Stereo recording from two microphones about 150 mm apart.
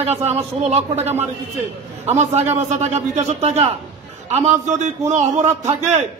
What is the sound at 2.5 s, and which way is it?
A man's voice, 50° right (ahead or behind).